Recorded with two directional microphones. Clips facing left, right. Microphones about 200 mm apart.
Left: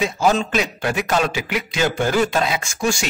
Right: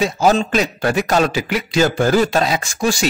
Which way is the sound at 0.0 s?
35° right (ahead or behind).